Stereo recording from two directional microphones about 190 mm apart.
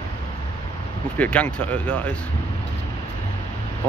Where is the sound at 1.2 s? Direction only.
5° left (ahead or behind).